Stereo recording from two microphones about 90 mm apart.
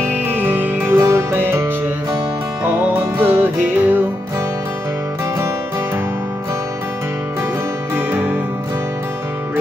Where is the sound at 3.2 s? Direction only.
20° right (ahead or behind).